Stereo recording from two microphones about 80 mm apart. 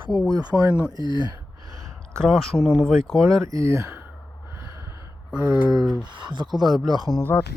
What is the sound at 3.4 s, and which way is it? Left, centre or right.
Speech, right.